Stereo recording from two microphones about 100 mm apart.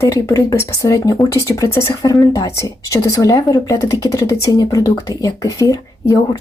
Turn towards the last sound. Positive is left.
turn(degrees=35)  # may be behind; listen again after turning